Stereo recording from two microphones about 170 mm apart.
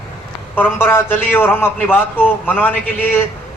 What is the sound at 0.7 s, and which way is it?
A man's voice, 10° left (ahead or behind).